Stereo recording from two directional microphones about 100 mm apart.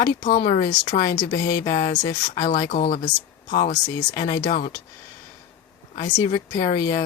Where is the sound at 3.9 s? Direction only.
40° left (ahead or behind).